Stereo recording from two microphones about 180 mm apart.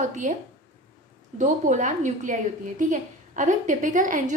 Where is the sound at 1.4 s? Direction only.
45° right (ahead or behind).